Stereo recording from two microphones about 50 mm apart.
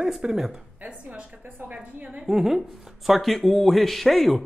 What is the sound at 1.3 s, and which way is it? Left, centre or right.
Speech, right.